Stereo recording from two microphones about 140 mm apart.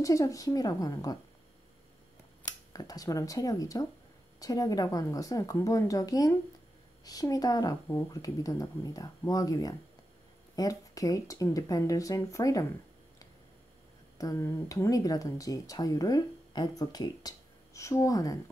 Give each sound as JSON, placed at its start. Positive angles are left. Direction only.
{"t": 0.0, "sound": "speech", "side_deg": 25}
{"t": 2.4, "sound": "speech", "side_deg": 30}
{"t": 14.1, "sound": "speech", "side_deg": 25}